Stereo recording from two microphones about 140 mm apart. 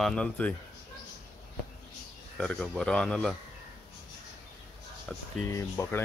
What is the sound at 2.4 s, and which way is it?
Speech, 5° left (ahead or behind).